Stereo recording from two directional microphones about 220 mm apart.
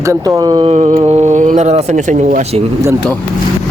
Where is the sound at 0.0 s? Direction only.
15° right (ahead or behind); by 2.6 s 30° right (ahead or behind).